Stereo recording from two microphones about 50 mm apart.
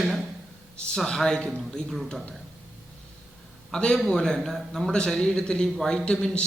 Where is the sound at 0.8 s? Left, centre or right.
Centre.